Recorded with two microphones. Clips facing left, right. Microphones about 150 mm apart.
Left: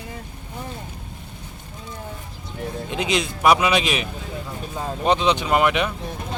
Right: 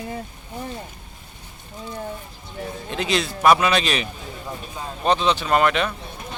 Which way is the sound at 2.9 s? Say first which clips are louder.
Even; 15° left (ahead or behind).